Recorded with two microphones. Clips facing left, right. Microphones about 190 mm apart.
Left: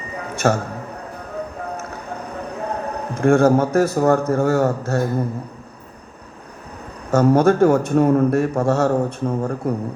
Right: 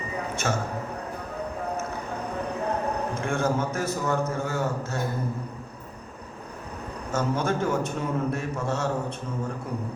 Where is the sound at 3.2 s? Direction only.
50° left (ahead or behind).